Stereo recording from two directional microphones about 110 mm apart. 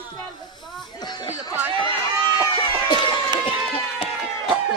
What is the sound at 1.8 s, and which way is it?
Run, 45° right (ahead or behind).